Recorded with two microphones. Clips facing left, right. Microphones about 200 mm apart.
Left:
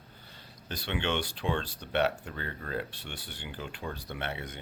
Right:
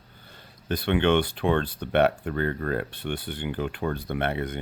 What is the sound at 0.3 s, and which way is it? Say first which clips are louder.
Speech: right 12 dB; 55° right (ahead or behind).